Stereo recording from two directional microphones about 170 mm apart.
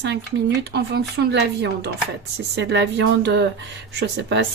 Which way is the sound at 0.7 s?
75° right (ahead or behind).